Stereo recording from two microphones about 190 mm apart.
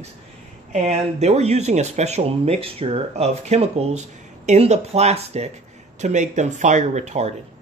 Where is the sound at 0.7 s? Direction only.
35° right (ahead or behind).